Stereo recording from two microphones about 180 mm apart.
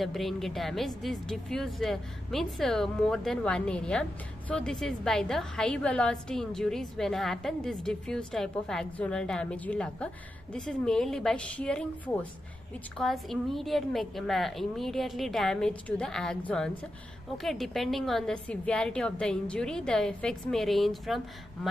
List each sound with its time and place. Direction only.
0.0 s a woman's voice: centre (ahead or behind)